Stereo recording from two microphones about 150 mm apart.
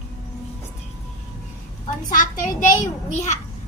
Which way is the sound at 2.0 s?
60° left (ahead or behind).